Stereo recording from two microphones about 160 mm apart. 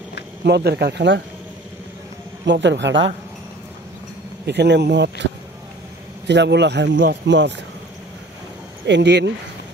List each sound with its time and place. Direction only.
0.4 s a man's voice: 90° right
2.4 s a man's voice: 90° right
4.5 s a man's voice: 90° right
6.2 s a man's voice: 90° right
8.8 s a man's voice: 90° right